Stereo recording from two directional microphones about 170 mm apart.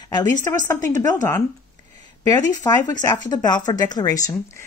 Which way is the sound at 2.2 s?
20° left (ahead or behind).